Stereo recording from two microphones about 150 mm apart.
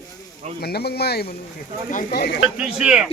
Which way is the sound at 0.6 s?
90° left.